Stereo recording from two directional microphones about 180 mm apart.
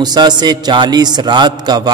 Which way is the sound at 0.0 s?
25° right (ahead or behind).